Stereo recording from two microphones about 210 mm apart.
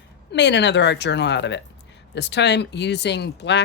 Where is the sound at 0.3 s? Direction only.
55° left (ahead or behind).